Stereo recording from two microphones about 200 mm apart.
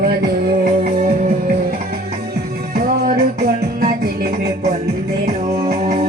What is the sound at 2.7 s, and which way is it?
Music, 45° right (ahead or behind).